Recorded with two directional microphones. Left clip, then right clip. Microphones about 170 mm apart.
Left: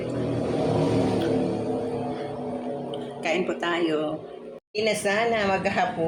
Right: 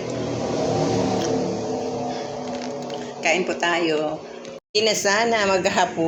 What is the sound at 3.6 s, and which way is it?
Speech, 20° left (ahead or behind).